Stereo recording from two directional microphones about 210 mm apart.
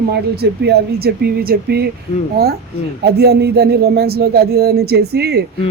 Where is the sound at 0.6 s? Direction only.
50° right (ahead or behind).